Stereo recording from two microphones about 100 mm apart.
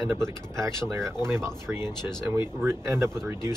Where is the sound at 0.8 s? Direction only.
30° right (ahead or behind).